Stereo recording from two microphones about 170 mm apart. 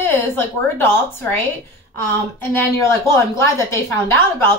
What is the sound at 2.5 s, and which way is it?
A woman's voice, 15° left (ahead or behind).